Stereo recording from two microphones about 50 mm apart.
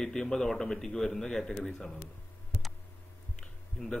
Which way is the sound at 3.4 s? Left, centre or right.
Centre.